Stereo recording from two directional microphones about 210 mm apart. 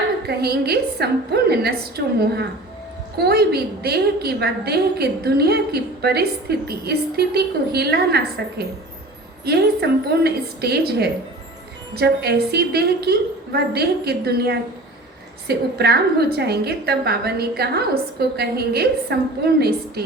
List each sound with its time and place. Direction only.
0.3 s a woman's voice: 50° right (ahead or behind)